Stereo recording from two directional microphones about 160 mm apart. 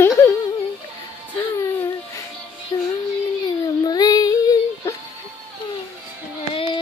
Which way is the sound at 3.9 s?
25° left (ahead or behind).